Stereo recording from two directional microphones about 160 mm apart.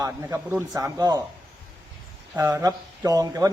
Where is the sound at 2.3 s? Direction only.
20° right (ahead or behind).